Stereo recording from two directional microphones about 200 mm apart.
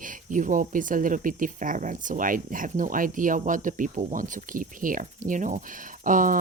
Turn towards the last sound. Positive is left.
turn(degrees=-40)  # may be behind; listen again after turning